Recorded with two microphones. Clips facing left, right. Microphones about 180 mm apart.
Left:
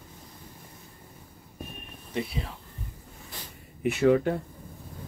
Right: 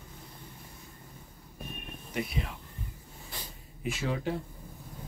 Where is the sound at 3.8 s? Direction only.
60° left (ahead or behind).